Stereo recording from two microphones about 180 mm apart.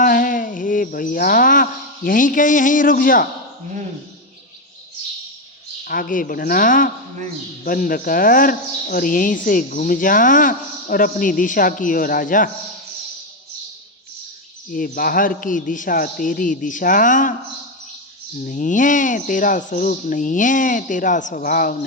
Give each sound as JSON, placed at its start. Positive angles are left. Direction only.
{"t": 0.0, "sound": "a sound", "side_deg": 50}
{"t": 2.0, "sound": "speech", "side_deg": 50}
{"t": 5.8, "sound": "speech", "side_deg": 55}
{"t": 14.7, "sound": "speech", "side_deg": 50}
{"t": 18.3, "sound": "speech", "side_deg": 45}